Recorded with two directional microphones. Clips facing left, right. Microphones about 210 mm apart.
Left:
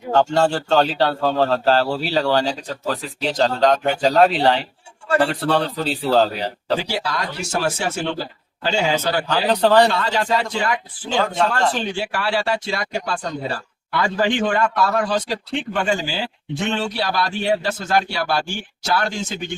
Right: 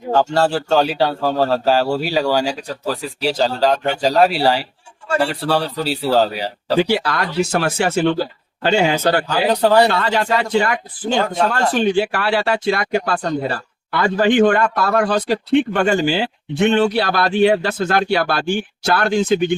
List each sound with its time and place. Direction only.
0.3 s a man's voice: 5° right (ahead or behind)
6.7 s speech: 60° right (ahead or behind)
9.3 s a man's voice: 10° right (ahead or behind)
9.9 s speech: 60° right (ahead or behind)